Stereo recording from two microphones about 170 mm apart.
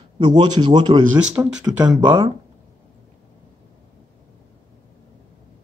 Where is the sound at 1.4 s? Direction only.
15° right (ahead or behind).